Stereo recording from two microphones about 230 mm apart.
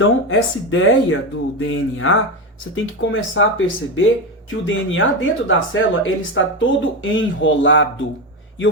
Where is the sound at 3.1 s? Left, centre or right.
Left.